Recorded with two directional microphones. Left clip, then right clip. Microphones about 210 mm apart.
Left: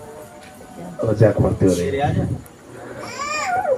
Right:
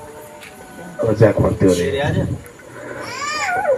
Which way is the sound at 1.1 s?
25° left (ahead or behind).